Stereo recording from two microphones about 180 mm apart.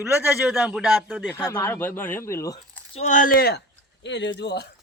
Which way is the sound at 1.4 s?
20° left (ahead or behind).